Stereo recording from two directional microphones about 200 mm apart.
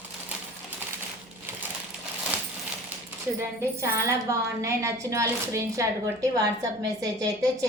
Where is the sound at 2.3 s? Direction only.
5° right (ahead or behind).